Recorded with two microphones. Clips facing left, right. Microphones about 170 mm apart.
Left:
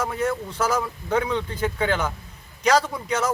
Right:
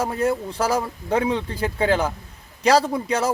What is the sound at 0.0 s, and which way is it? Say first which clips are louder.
Speech: right 3 dB; 30° right (ahead or behind).